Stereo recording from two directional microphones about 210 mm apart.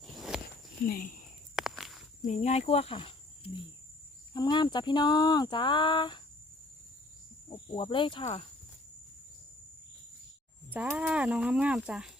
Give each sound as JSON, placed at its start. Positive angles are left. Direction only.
{"t": 0.0, "sound": "walk", "side_deg": 0}
{"t": 0.9, "sound": "speech", "side_deg": 40}
{"t": 1.5, "sound": "walk", "side_deg": 0}
{"t": 2.2, "sound": "speech", "side_deg": 35}
{"t": 7.5, "sound": "speech", "side_deg": 20}
{"t": 10.7, "sound": "speech", "side_deg": -10}